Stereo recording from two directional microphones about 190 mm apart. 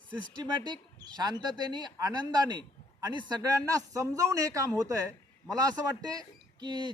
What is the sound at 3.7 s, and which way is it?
A man's voice, 15° right (ahead or behind).